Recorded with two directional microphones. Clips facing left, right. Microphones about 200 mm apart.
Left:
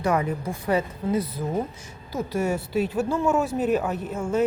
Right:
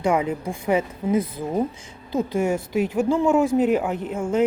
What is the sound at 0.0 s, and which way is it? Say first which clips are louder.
Speech: right 2 dB; 15° right (ahead or behind).